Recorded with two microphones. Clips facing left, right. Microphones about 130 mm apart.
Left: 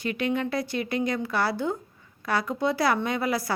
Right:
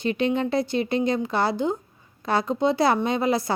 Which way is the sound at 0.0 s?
25° right (ahead or behind).